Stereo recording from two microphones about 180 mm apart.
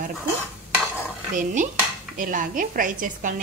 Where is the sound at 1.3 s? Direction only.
45° right (ahead or behind).